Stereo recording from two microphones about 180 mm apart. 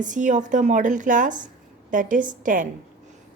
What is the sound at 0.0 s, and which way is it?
A woman's voice, 45° right (ahead or behind).